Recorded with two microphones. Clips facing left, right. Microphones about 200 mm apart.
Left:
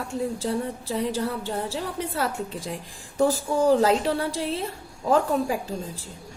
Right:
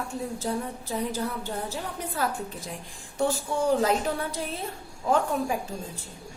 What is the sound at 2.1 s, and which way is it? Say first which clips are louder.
Speech: left 2 dB; 90° left.